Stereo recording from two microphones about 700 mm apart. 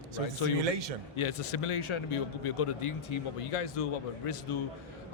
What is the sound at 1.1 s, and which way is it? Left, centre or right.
A man's voice, left.